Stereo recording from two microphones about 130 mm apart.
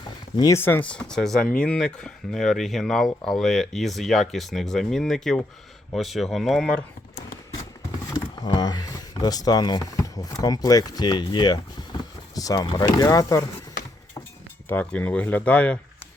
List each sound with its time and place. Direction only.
0.3 s speech: 30° left (ahead or behind)
0.6 s speech: 15° left (ahead or behind)
8.1 s speech: 30° left (ahead or behind)
14.7 s speech: 15° left (ahead or behind)